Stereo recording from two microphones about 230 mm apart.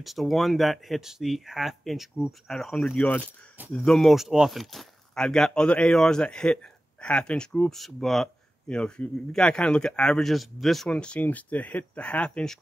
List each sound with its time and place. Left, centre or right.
0.0 s speech: centre